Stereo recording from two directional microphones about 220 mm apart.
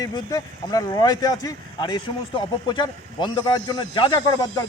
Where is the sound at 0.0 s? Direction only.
15° left (ahead or behind).